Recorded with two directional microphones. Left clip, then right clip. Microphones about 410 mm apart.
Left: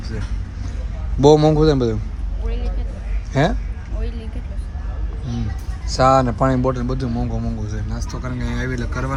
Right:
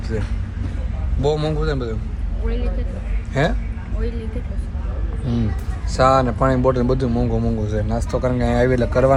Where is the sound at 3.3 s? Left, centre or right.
Centre.